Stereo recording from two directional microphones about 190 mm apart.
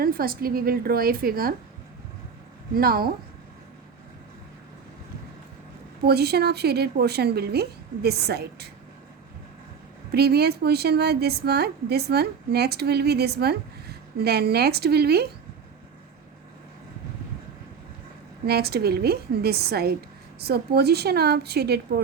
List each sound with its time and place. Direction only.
0.0 s a woman's voice: 50° right (ahead or behind)
2.7 s a woman's voice: 50° right (ahead or behind)
6.1 s a woman's voice: 55° right (ahead or behind)
10.1 s a woman's voice: 55° right (ahead or behind)
18.4 s a woman's voice: 55° right (ahead or behind)